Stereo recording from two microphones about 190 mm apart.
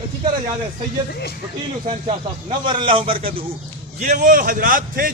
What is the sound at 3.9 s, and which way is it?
A man's voice, 40° right (ahead or behind).